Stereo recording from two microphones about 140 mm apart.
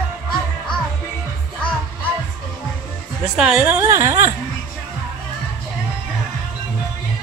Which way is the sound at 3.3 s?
5° right (ahead or behind).